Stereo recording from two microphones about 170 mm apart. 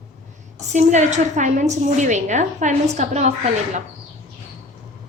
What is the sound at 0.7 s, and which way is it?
A woman's voice, 45° right (ahead or behind).